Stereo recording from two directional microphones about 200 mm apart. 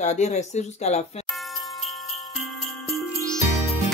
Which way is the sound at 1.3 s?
Centre (ahead or behind).